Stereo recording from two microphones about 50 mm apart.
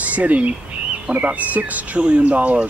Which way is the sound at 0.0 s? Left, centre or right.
Right.